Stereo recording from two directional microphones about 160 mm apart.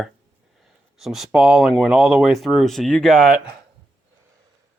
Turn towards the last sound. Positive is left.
turn(degrees=0)  # may be behind; listen again after turning